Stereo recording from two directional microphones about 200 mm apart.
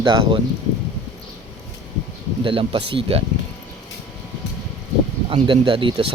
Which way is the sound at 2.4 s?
25° right (ahead or behind).